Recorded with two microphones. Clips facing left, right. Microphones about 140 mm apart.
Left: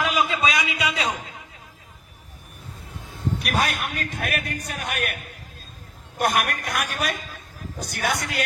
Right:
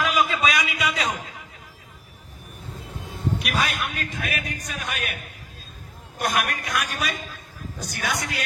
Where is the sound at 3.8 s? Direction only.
55° left (ahead or behind).